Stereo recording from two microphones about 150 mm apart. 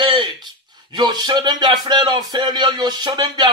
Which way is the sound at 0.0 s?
30° right (ahead or behind).